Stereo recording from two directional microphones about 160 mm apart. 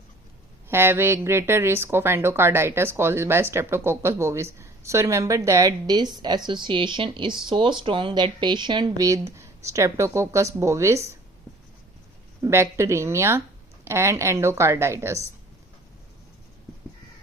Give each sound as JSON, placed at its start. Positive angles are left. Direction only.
{"t": 0.7, "sound": "a woman's voice", "side_deg": -15}
{"t": 12.4, "sound": "a woman's voice", "side_deg": -15}